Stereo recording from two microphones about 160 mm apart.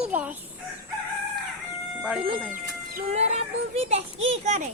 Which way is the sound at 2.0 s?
5° right (ahead or behind).